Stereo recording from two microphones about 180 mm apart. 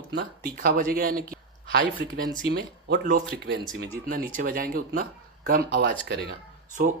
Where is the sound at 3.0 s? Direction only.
55° right (ahead or behind).